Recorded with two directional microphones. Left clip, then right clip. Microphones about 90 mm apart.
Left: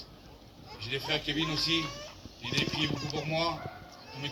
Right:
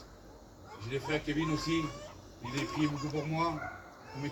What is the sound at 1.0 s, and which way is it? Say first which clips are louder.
Speech: left 2 dB; 20° left (ahead or behind).